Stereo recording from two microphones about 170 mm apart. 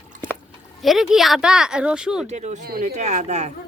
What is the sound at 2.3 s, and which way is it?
Speech, 45° right (ahead or behind).